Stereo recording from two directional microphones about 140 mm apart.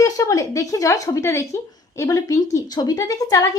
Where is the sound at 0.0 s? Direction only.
25° left (ahead or behind).